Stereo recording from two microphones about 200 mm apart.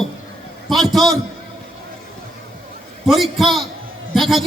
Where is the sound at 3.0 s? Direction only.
Centre (ahead or behind).